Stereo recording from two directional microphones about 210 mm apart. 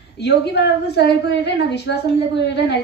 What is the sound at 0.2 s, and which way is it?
A woman's voice, 55° left (ahead or behind).